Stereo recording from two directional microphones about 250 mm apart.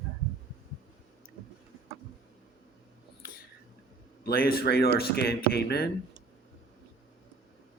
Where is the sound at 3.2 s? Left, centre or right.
Left.